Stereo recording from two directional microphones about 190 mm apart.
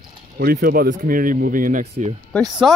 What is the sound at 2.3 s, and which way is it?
Speech, centre (ahead or behind).